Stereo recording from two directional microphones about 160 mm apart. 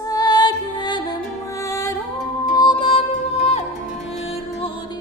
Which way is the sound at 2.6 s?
30° left (ahead or behind).